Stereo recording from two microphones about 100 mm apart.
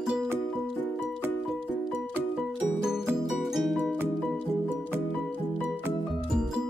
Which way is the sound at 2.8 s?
5° right (ahead or behind).